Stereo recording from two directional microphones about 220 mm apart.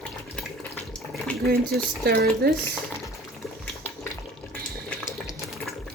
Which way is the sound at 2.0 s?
45° right (ahead or behind).